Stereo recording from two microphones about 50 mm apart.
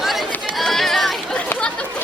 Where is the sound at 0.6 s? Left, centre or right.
Centre.